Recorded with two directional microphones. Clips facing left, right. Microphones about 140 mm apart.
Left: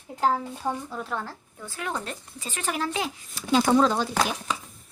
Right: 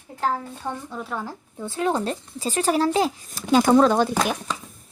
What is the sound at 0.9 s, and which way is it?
Speech, centre (ahead or behind).